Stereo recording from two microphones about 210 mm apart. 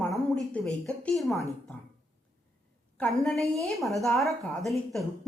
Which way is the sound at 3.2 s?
Centre (ahead or behind).